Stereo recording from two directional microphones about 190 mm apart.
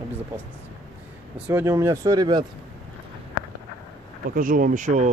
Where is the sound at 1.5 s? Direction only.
10° right (ahead or behind).